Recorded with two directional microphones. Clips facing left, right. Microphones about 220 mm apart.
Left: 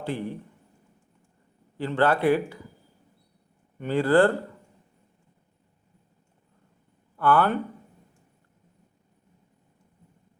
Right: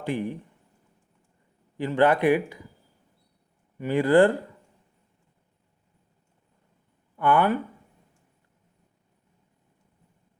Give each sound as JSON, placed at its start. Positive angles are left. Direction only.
{"t": 0.0, "sound": "speech", "side_deg": -15}
{"t": 1.8, "sound": "speech", "side_deg": -15}
{"t": 3.8, "sound": "speech", "side_deg": -15}
{"t": 7.2, "sound": "speech", "side_deg": -15}